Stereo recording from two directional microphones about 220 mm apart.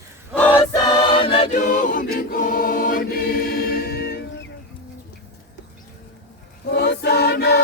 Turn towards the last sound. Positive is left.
turn(degrees=45)  # may be behind; listen again after turning